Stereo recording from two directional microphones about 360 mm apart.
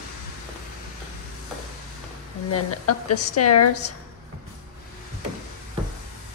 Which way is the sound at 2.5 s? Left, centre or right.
Left.